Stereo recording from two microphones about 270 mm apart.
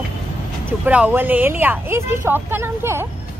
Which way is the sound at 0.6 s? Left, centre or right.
Centre.